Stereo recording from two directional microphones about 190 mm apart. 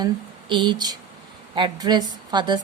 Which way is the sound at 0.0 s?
25° right (ahead or behind).